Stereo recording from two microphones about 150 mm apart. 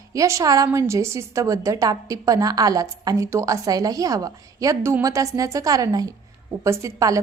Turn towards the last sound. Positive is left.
turn(degrees=-20)  # may be behind; listen again after turning